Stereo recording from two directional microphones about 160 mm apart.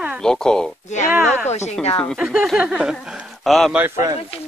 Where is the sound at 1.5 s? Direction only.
45° left (ahead or behind).